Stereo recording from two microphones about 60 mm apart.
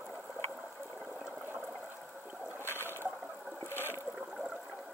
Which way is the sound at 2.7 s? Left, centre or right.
Left.